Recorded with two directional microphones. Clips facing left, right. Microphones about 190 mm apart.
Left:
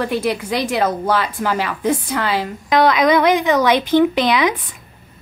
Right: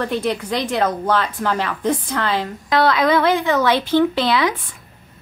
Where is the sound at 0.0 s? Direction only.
10° left (ahead or behind).